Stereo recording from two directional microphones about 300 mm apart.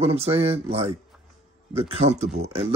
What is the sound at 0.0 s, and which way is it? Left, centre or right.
Speech, centre.